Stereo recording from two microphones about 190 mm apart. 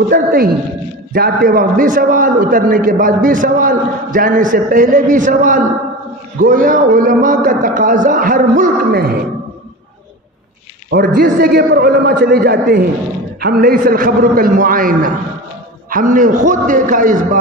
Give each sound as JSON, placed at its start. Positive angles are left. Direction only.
{"t": 0.1, "sound": "a man's voice", "side_deg": -55}
{"t": 10.9, "sound": "a man's voice", "side_deg": -55}